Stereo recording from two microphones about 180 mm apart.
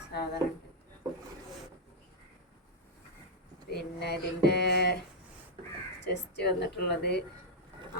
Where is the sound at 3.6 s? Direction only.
65° left (ahead or behind).